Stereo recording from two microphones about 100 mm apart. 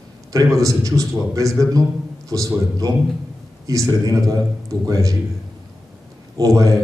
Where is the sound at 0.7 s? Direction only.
35° right (ahead or behind).